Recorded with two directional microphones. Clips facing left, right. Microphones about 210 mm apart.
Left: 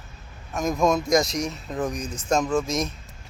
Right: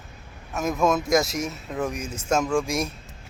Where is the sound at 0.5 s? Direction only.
5° right (ahead or behind).